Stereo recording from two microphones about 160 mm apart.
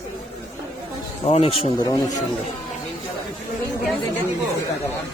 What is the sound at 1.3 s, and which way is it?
Speech, 40° left (ahead or behind).